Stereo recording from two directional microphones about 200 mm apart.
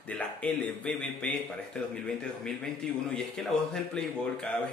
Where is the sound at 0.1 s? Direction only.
5° left (ahead or behind).